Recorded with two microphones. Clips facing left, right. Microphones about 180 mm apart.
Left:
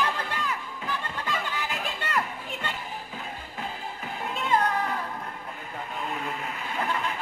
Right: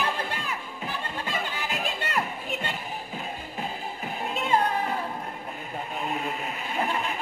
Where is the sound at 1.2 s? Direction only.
25° right (ahead or behind).